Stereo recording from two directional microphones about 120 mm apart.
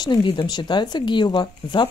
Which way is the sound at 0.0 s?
40° left (ahead or behind).